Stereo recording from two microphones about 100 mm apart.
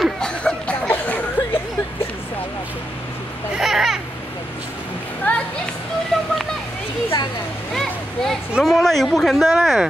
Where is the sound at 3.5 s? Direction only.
5° right (ahead or behind).